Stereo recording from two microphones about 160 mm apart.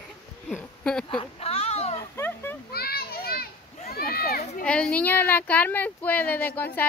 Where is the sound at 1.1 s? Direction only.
40° left (ahead or behind).